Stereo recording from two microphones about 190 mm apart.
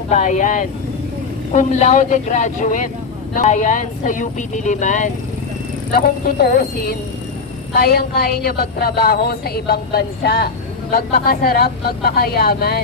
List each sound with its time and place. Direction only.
0.1 s a woman's voice: 40° left (ahead or behind)
5.9 s a woman's voice: 50° left (ahead or behind)